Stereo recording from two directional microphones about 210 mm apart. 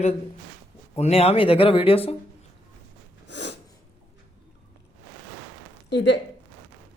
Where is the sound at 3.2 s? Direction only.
55° left (ahead or behind).